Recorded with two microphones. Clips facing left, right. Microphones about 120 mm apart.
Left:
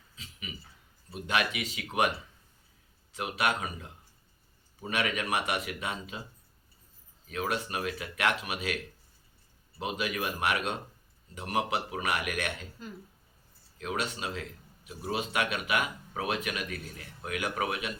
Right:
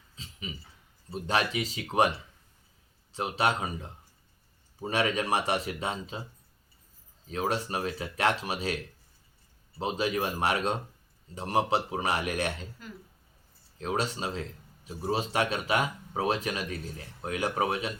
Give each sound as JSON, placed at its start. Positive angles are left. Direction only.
{"t": 0.2, "sound": "a sound", "side_deg": -30}
{"t": 1.1, "sound": "speech", "side_deg": -35}
{"t": 3.1, "sound": "speech", "side_deg": -30}
{"t": 7.3, "sound": "speech", "side_deg": -30}
{"t": 13.7, "sound": "speech", "side_deg": -35}